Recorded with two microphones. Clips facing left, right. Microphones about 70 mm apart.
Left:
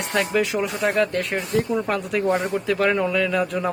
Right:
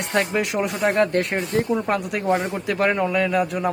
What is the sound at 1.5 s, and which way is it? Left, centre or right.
Speech, right.